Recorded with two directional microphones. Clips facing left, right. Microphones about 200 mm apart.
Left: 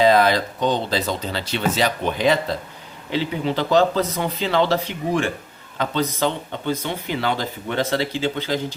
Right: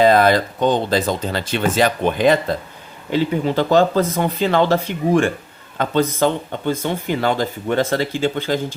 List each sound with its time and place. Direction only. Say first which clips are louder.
0.0 s speech: right 3 dB; 50° right (ahead or behind)